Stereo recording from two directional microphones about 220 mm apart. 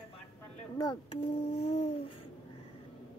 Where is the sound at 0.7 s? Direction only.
20° left (ahead or behind).